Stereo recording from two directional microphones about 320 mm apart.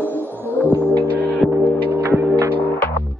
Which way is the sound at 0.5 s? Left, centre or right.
Centre.